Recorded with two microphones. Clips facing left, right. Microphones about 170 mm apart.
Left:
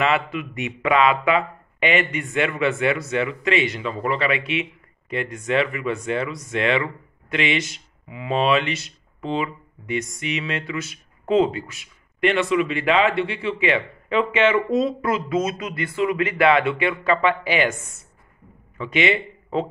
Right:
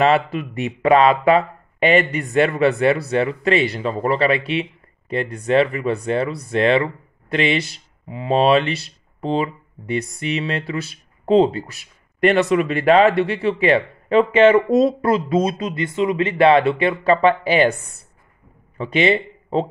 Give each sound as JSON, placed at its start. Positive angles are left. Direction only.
{"t": 0.0, "sound": "speech", "side_deg": -35}